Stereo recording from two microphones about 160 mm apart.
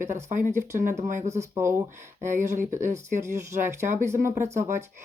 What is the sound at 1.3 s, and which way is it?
Speech, 15° right (ahead or behind).